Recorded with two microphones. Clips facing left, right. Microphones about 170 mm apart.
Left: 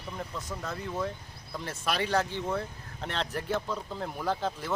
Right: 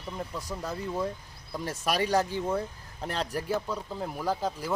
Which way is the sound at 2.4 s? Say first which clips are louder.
Right 2 dB; 15° right (ahead or behind).